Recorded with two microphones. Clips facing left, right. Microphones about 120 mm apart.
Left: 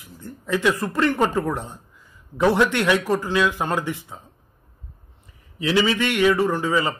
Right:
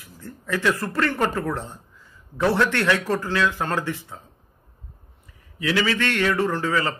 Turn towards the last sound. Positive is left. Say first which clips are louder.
# left 2 dB
turn(degrees=15)  # may be behind; listen again after turning